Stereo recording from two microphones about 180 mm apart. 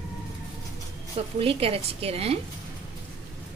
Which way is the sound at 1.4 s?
30° right (ahead or behind).